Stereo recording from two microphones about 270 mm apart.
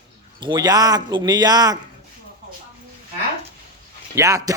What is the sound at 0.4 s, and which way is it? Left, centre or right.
A man's voice, centre.